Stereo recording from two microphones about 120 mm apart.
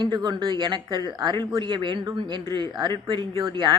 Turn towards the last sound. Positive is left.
turn(degrees=-40)  # may be behind; listen again after turning